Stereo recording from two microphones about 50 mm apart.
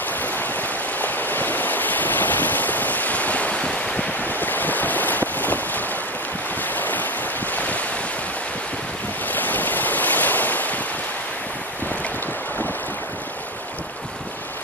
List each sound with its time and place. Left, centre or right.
0.2 s a sound: left
6.7 s waves: left
9.3 s waves: left